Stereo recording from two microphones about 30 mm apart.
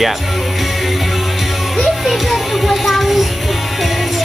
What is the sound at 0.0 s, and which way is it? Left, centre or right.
Music, centre.